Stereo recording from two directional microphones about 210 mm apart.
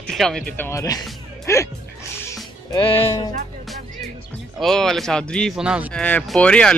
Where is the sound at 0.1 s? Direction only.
Centre (ahead or behind).